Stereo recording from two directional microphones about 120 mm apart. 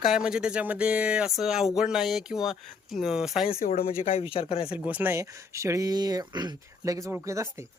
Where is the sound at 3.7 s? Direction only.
60° left (ahead or behind).